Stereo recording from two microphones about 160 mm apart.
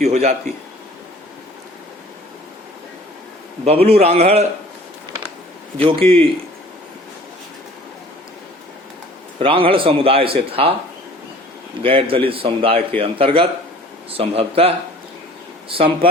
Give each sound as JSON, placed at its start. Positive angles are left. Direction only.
{"t": 0.0, "sound": "a man's voice", "side_deg": -45}
{"t": 3.8, "sound": "a man's voice", "side_deg": -40}
{"t": 5.7, "sound": "a man's voice", "side_deg": -35}
{"t": 9.4, "sound": "a man's voice", "side_deg": -35}
{"t": 11.8, "sound": "a man's voice", "side_deg": -35}
{"t": 15.7, "sound": "a man's voice", "side_deg": -35}